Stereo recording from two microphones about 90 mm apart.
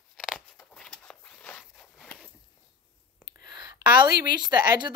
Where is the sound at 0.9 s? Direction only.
10° left (ahead or behind).